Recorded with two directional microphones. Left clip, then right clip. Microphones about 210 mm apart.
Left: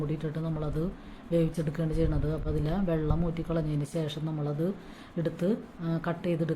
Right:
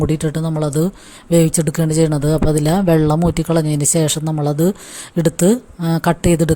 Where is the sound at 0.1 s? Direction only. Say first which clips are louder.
Right 14 dB; 50° right (ahead or behind).